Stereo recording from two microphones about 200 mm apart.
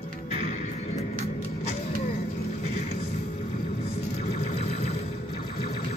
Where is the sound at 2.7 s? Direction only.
30° left (ahead or behind).